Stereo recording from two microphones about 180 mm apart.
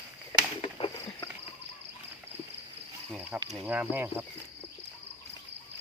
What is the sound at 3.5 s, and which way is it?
Speech, 5° right (ahead or behind).